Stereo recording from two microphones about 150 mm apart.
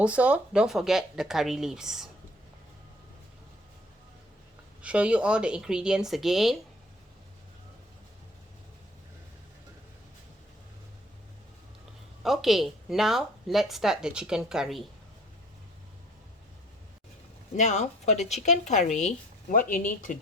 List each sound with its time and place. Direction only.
0.0 s speech: 10° right (ahead or behind)
4.8 s speech: 10° right (ahead or behind)
12.2 s speech: centre (ahead or behind)
17.6 s speech: 50° left (ahead or behind)